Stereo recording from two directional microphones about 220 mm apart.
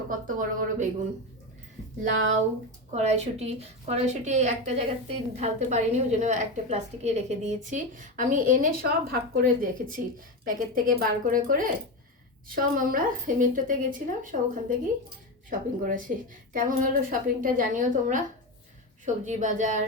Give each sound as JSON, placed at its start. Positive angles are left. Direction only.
{"t": 0.1, "sound": "a woman's voice", "side_deg": -35}
{"t": 2.9, "sound": "a woman's voice", "side_deg": -30}